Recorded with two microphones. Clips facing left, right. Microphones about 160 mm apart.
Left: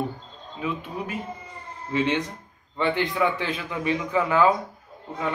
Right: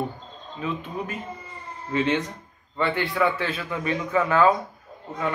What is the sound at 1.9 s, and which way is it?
A man's voice, 10° left (ahead or behind).